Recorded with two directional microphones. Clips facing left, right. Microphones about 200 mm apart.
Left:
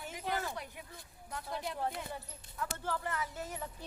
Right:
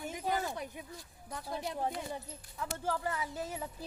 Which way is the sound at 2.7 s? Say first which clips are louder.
Right 4 dB; 10° right (ahead or behind).